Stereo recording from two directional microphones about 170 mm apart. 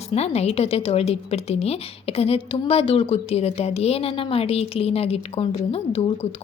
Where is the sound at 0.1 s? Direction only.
35° left (ahead or behind).